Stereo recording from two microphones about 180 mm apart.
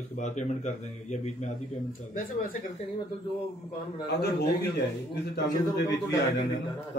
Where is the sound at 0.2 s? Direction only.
40° left (ahead or behind).